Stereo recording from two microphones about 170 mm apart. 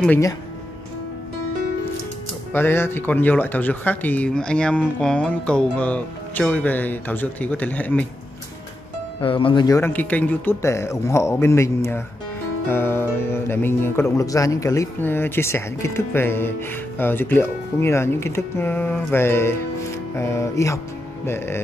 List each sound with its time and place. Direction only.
2.5 s speech: 15° left (ahead or behind)
9.2 s speech: 30° left (ahead or behind)
9.8 s speech: 10° left (ahead or behind)